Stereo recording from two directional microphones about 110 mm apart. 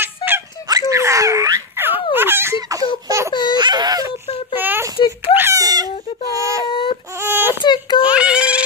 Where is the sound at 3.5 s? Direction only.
40° right (ahead or behind).